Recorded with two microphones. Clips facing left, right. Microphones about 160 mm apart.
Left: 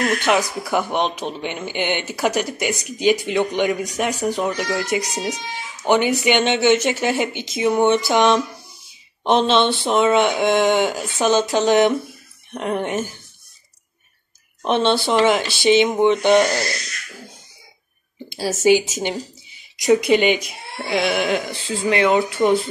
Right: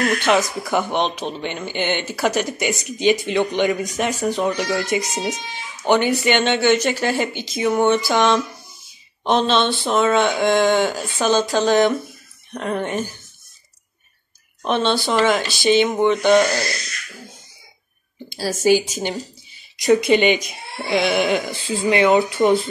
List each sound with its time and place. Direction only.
0.2 s speech: 10° left (ahead or behind)
5.9 s speech: 15° left (ahead or behind)
14.6 s speech: 20° left (ahead or behind)
18.3 s speech: 25° left (ahead or behind)
20.1 s speech: 5° left (ahead or behind)